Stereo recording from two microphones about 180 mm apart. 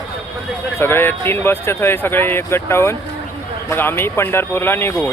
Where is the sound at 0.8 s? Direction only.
10° left (ahead or behind).